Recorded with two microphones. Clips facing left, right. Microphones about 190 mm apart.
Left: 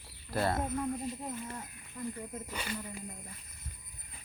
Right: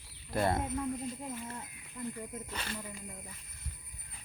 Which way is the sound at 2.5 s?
10° left (ahead or behind).